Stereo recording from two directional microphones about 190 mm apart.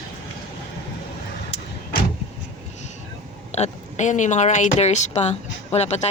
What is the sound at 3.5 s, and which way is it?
Speech, 35° left (ahead or behind).